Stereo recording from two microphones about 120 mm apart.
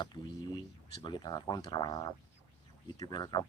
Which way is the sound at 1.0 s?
35° left (ahead or behind).